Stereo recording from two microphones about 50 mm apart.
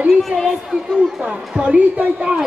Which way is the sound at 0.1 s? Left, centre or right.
Centre.